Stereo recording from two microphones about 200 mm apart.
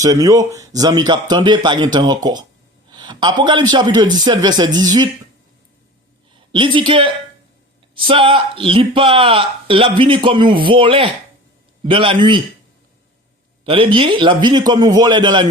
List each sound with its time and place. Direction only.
0.0 s speech: 15° right (ahead or behind)
6.5 s speech: 25° right (ahead or behind)
13.7 s speech: 25° right (ahead or behind)